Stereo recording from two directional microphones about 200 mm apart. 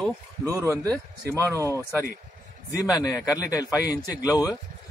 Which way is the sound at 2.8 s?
15° left (ahead or behind).